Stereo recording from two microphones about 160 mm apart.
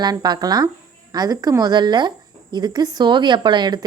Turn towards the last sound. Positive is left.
turn(degrees=-25)  # may be behind; listen again after turning